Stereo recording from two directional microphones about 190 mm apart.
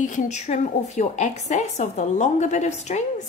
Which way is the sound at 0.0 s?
40° left (ahead or behind).